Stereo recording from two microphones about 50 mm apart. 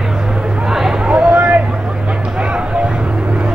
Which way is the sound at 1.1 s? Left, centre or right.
Centre.